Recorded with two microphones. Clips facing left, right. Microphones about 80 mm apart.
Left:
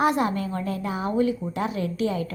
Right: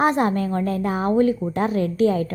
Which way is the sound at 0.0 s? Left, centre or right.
Right.